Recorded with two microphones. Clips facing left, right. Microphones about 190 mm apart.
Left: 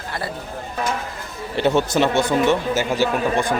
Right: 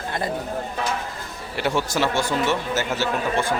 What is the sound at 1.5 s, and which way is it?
A man's voice, 20° left (ahead or behind).